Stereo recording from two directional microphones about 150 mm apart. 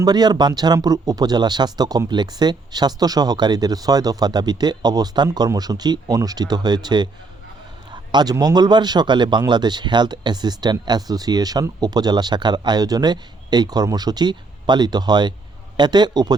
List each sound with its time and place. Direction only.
0.0 s a man's voice: 25° right (ahead or behind)